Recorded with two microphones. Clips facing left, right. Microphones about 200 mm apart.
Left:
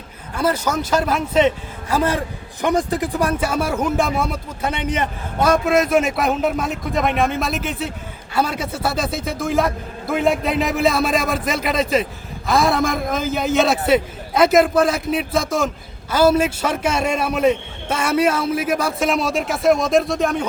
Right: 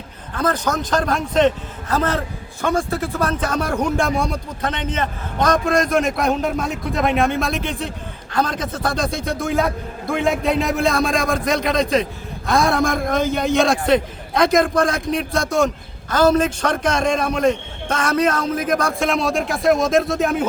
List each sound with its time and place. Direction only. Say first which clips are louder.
0.3 s a man's voice: left 1 dB; 10° left (ahead or behind)